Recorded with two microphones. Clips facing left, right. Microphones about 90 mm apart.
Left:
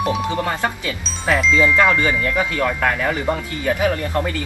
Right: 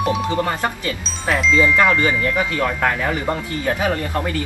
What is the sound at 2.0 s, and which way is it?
Speech, 15° right (ahead or behind).